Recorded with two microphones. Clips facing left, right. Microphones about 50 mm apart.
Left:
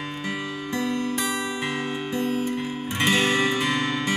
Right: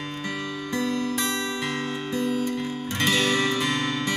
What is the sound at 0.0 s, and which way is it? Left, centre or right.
Music, centre.